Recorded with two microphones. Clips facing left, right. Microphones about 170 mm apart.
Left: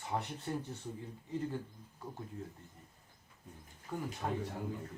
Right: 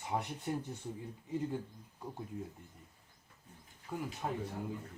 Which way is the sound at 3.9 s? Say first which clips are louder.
Even; 5° right (ahead or behind).